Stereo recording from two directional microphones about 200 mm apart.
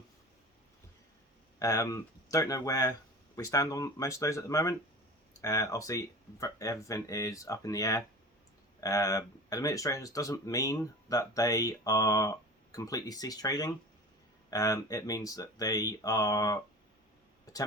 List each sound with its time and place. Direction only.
1.5 s speech: 15° left (ahead or behind)